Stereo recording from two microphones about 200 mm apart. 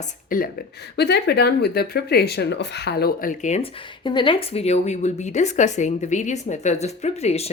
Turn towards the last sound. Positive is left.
turn(degrees=30)  # may be behind; listen again after turning